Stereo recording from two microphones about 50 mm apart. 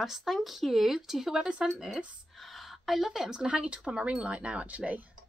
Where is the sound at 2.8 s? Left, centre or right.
Centre.